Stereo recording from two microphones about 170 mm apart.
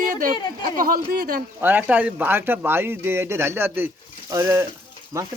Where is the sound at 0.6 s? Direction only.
55° right (ahead or behind).